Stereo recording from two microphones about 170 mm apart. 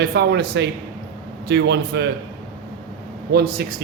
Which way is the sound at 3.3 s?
70° right (ahead or behind).